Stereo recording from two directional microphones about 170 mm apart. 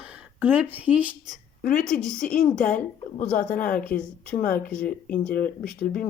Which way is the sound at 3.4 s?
55° left (ahead or behind).